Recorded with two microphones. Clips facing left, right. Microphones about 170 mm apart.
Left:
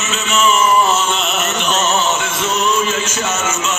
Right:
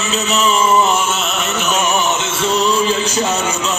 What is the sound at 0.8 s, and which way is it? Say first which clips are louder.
Music: even; 15° right (ahead or behind).